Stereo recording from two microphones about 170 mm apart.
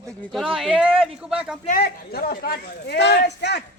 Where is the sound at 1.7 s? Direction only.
60° left (ahead or behind); by 3.6 s 80° left.